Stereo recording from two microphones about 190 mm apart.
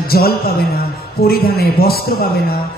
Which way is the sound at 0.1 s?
55° left (ahead or behind).